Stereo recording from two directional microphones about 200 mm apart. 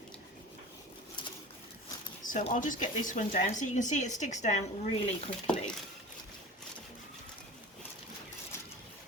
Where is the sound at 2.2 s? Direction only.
40° left (ahead or behind).